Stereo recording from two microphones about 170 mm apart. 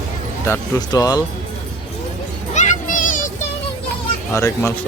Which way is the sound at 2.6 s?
50° left (ahead or behind).